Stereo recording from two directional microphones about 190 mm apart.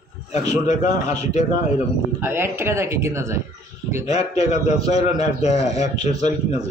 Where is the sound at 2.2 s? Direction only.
10° right (ahead or behind).